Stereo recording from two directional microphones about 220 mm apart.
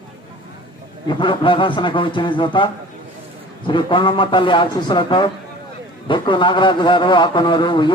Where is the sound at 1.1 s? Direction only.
20° left (ahead or behind).